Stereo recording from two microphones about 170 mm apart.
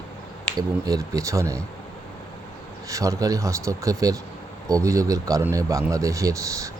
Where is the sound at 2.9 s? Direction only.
20° right (ahead or behind).